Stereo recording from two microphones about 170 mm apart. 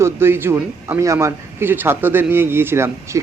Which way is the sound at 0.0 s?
15° right (ahead or behind).